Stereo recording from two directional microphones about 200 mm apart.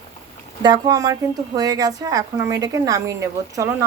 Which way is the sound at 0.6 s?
20° right (ahead or behind).